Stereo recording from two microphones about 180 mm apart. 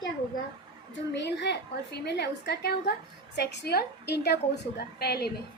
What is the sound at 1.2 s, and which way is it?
A woman's voice, 70° left (ahead or behind).